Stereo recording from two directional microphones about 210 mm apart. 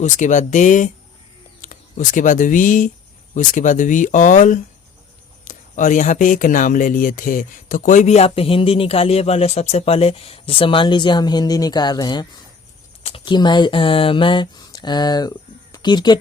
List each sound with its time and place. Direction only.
0.0 s speech: 35° left (ahead or behind); by 16.1 s 20° left (ahead or behind)